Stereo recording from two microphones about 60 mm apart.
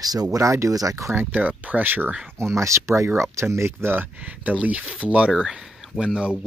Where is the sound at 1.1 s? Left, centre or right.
Right.